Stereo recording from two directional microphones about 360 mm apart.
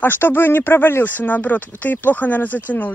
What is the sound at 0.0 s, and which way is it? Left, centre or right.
Speech, centre.